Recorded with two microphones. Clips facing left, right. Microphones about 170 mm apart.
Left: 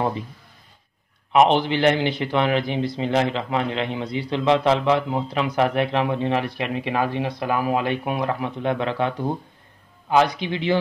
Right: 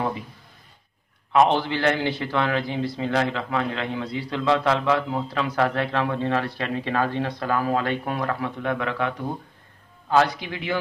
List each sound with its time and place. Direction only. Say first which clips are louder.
1.3 s a man's voice: left 2 dB; 20° left (ahead or behind)